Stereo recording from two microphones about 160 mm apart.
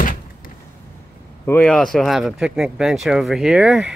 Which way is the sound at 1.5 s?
5° left (ahead or behind).